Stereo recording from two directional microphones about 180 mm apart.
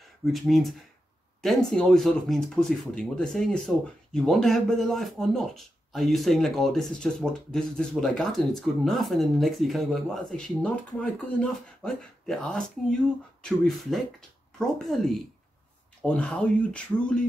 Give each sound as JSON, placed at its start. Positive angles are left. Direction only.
{"t": 0.2, "sound": "speech", "side_deg": 0}